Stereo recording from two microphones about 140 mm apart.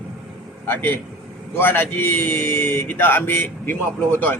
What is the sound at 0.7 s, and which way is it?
A man's voice, 15° left (ahead or behind).